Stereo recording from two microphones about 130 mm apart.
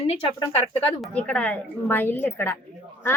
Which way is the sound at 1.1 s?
10° left (ahead or behind).